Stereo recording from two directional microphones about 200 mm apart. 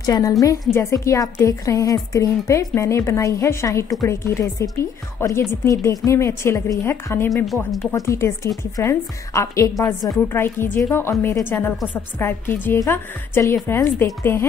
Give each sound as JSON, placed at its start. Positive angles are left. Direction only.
{"t": 0.0, "sound": "a woman's voice", "side_deg": 20}
{"t": 7.2, "sound": "a woman's voice", "side_deg": 0}
{"t": 7.9, "sound": "a woman's voice", "side_deg": 15}